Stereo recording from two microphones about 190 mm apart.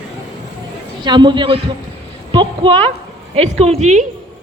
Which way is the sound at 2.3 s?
25° right (ahead or behind).